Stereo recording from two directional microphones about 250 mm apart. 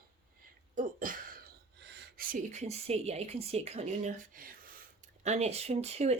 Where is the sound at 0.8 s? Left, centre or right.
Right.